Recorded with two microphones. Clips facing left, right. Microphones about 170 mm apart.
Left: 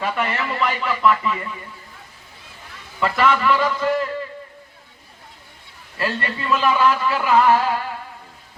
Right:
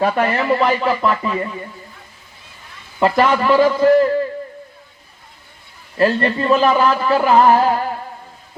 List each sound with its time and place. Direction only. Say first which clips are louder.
0.0 s speech: right 7 dB; 40° right (ahead or behind)
3.0 s speech: right 4 dB; 40° right (ahead or behind)
6.0 s speech: right 10 dB; 40° right (ahead or behind)